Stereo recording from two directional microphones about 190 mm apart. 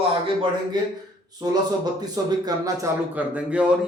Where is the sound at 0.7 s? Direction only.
20° right (ahead or behind).